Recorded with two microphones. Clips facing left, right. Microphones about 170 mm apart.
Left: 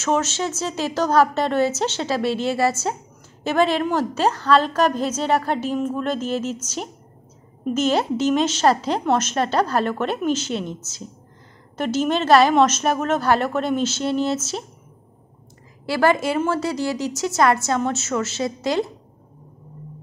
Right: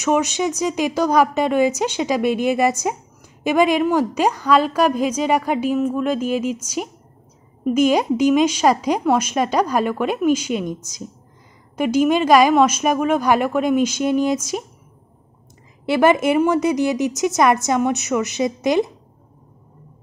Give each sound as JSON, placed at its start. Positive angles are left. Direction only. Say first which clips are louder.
{"t": 0.0, "sound": "a woman's voice", "louder": "right 3 dB", "side_deg": -15}
{"t": 15.8, "sound": "a woman's voice", "louder": "right 4 dB", "side_deg": -20}